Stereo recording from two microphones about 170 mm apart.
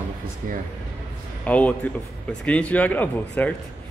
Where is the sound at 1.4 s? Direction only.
10° left (ahead or behind).